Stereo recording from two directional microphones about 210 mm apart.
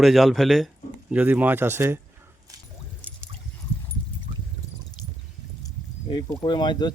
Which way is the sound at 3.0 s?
5° left (ahead or behind).